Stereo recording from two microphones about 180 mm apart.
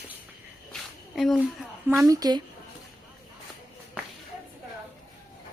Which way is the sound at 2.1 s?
20° right (ahead or behind).